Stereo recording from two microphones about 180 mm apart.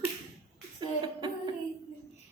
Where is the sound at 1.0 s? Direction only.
25° right (ahead or behind).